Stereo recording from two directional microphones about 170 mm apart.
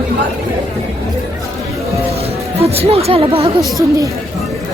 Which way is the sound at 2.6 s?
35° right (ahead or behind).